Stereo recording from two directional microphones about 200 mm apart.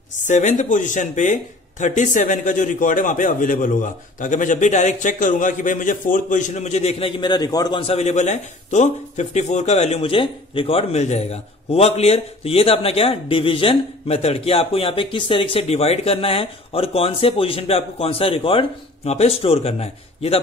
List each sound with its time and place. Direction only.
0.3 s speech: 40° left (ahead or behind)